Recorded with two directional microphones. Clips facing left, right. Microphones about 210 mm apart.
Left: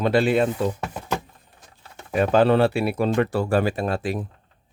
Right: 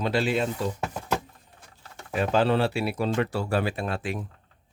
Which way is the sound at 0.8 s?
5° right (ahead or behind).